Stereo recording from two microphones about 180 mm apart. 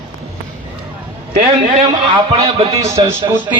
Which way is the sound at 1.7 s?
35° right (ahead or behind).